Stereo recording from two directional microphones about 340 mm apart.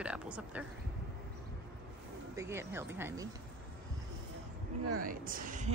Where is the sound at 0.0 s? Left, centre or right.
Centre.